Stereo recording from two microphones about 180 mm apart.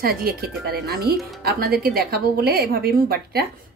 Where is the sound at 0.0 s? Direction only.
55° right (ahead or behind).